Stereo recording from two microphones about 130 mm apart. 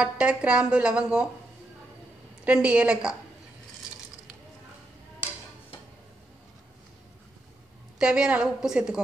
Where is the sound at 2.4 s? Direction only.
10° right (ahead or behind).